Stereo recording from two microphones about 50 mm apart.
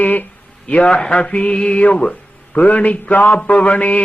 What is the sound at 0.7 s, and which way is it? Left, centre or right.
Mantra, left.